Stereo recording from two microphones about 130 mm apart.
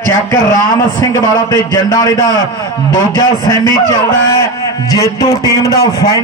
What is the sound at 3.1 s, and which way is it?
Speech, 30° left (ahead or behind).